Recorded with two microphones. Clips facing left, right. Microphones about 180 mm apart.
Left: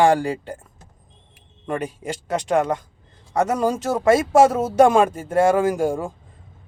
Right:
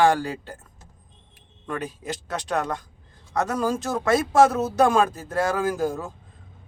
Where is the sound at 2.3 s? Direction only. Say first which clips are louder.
Left 7 dB; 25° left (ahead or behind).